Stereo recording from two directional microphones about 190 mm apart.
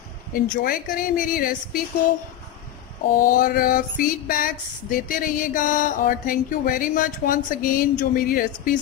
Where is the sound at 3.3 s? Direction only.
50° left (ahead or behind).